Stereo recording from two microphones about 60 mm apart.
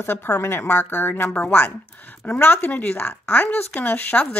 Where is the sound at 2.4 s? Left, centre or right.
Left.